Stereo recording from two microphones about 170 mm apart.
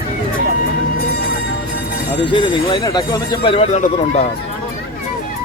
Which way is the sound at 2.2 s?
25° left (ahead or behind).